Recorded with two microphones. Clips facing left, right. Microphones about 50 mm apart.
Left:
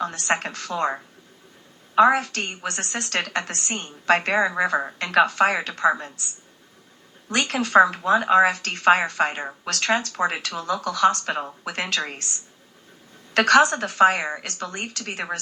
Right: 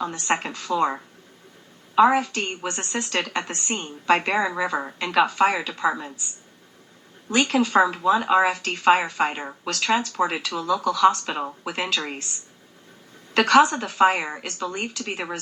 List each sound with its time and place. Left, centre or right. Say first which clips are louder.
0.0 s speech: even; left
2.0 s a woman's voice: even; left
7.3 s speech: right 3 dB; left